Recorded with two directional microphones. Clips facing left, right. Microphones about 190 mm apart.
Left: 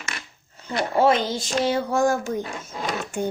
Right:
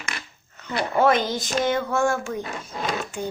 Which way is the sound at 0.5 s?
30° left (ahead or behind).